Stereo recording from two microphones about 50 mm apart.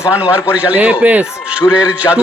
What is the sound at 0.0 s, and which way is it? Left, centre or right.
A man's voice, right.